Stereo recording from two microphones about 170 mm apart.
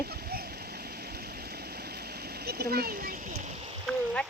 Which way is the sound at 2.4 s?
65° right (ahead or behind).